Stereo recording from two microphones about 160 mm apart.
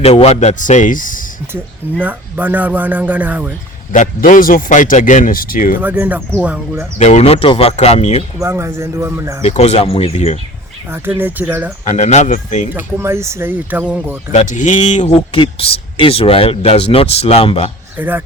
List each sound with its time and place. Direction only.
0.0 s a man's voice: 40° left (ahead or behind); by 1.2 s 55° left (ahead or behind)
1.5 s a man's voice: 10° right (ahead or behind)
3.9 s speech: 55° left (ahead or behind)
5.8 s a man's voice: 10° right (ahead or behind)
7.0 s speech: 40° left (ahead or behind)
8.4 s a man's voice: 15° right (ahead or behind)
9.4 s speech: 45° left (ahead or behind)
10.9 s a man's voice: 15° right (ahead or behind)
11.9 s a man's voice: 45° left (ahead or behind)
12.7 s a man's voice: 15° right (ahead or behind)
14.3 s speech: 50° left (ahead or behind)
17.9 s speech: 10° right (ahead or behind)